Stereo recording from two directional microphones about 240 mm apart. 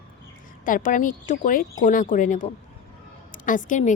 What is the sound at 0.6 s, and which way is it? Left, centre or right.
A woman's voice, left.